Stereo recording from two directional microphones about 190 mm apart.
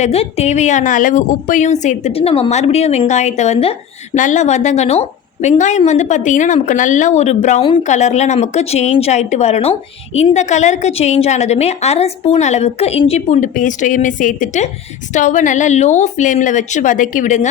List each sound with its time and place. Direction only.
0.0 s a woman's voice: 35° left (ahead or behind)